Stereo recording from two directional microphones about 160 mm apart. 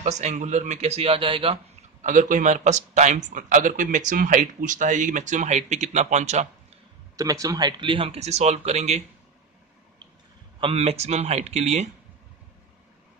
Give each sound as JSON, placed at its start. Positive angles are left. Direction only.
{"t": 0.0, "sound": "speech", "side_deg": -45}
{"t": 2.0, "sound": "speech", "side_deg": -55}
{"t": 7.2, "sound": "speech", "side_deg": -20}
{"t": 10.6, "sound": "speech", "side_deg": -40}